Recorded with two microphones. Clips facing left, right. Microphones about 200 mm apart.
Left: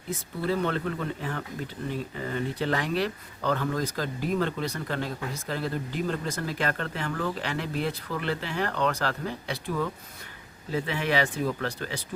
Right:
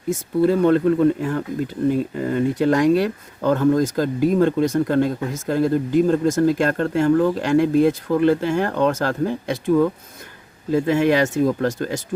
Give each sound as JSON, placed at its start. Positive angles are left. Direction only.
{"t": 0.1, "sound": "speech", "side_deg": -45}